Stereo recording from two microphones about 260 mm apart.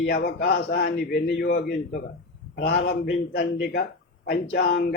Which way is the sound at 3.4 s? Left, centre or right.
Left.